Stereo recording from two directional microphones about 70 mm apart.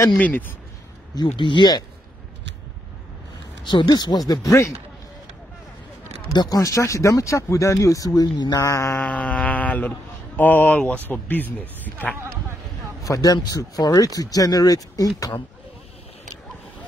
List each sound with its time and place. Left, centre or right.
0.2 s speech: left
1.1 s speech: left
3.6 s speech: left
4.5 s speech: left
6.2 s speech: left
6.6 s speech: left
8.6 s speech: left
9.0 s speech: centre
13.0 s speech: left